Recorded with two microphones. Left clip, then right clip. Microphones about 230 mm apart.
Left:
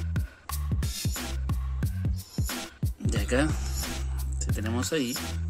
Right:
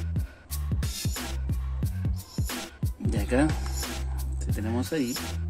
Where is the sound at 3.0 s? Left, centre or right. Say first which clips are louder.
Right 1 dB; centre.